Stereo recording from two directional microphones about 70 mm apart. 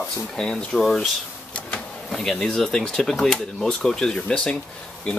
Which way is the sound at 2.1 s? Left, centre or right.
Centre.